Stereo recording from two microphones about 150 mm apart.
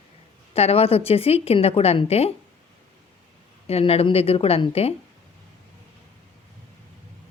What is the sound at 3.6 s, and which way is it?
A woman's voice, 40° left (ahead or behind).